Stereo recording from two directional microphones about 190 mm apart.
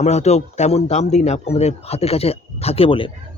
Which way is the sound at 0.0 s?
35° left (ahead or behind).